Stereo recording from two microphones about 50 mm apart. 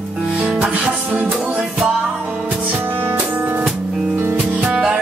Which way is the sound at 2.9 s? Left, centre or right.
Right.